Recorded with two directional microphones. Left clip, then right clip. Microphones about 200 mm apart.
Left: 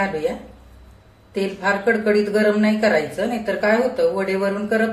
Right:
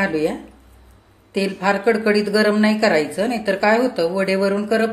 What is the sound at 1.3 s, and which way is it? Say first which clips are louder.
Speech: right 1 dB; 50° right (ahead or behind).